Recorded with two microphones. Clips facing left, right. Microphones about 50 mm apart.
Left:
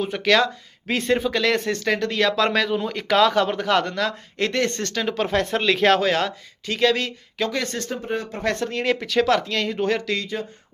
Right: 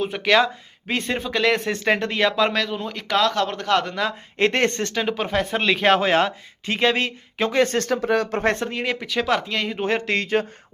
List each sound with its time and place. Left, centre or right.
0.2 s speech: centre
1.7 s speech: right
2.4 s speech: centre
4.4 s speech: right
4.8 s speech: centre
6.0 s speech: right
7.9 s speech: right
8.4 s speech: right
8.6 s speech: centre
10.1 s speech: right